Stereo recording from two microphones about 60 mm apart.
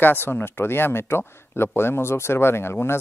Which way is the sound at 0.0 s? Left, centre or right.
Left.